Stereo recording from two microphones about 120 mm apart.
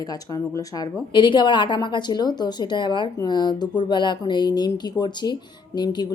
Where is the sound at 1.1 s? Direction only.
40° left (ahead or behind).